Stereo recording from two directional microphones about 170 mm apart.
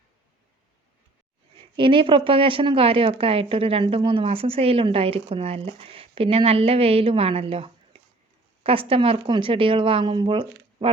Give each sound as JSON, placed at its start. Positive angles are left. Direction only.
{"t": 1.7, "sound": "a woman's voice", "side_deg": -30}